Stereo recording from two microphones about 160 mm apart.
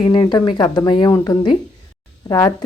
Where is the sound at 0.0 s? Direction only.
25° left (ahead or behind).